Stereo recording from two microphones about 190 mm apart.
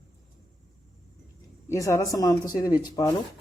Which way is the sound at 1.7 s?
15° left (ahead or behind).